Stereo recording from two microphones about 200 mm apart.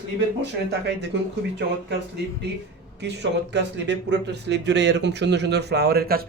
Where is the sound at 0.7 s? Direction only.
60° right (ahead or behind).